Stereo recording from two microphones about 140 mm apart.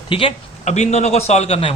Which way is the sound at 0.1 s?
40° left (ahead or behind).